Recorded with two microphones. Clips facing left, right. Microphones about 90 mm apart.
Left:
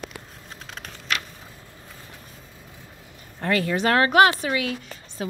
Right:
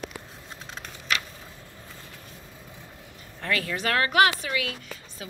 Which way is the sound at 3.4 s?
30° left (ahead or behind).